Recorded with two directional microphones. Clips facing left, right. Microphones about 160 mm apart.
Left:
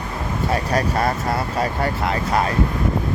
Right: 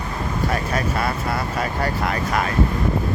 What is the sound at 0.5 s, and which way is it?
Speech, 35° left (ahead or behind).